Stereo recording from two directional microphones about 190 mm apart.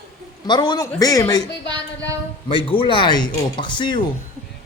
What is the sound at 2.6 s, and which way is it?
Speech, 25° left (ahead or behind).